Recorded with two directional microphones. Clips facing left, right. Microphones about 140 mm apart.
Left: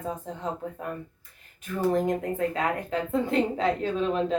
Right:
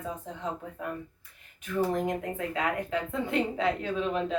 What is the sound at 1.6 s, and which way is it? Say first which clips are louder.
A woman's voice: left 3 dB; 40° left (ahead or behind).